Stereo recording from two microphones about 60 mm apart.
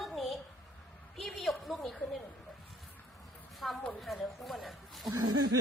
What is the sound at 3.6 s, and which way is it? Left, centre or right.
Speech, centre.